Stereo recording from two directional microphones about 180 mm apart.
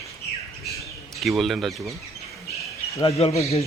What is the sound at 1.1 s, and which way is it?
Speech, centre (ahead or behind).